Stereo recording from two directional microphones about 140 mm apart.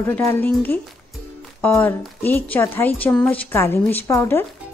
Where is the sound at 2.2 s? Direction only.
15° left (ahead or behind).